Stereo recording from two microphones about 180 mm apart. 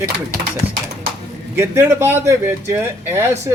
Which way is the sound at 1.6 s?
15° right (ahead or behind).